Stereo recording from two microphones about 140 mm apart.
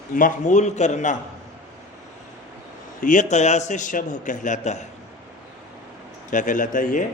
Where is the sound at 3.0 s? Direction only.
65° left (ahead or behind).